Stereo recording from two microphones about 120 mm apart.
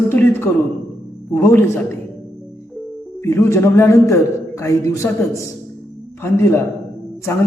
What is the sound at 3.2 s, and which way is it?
A man's voice, 20° left (ahead or behind).